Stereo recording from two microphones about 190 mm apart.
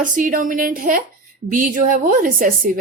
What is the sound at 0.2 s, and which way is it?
A woman's voice, 45° right (ahead or behind).